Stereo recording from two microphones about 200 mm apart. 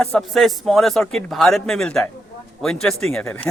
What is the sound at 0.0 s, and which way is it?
A man's voice, centre (ahead or behind).